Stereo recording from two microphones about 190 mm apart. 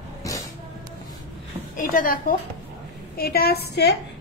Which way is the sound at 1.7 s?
45° left (ahead or behind).